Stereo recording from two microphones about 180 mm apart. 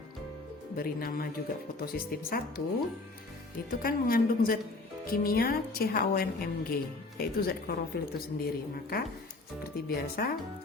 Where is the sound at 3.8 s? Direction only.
55° left (ahead or behind).